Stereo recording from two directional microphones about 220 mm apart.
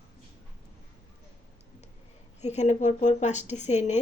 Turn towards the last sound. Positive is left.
turn(degrees=30)  # may be behind; listen again after turning